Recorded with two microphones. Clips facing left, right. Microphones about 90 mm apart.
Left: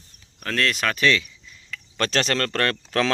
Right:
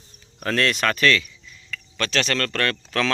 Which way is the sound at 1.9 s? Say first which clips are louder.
Left 1 dB; 35° left (ahead or behind).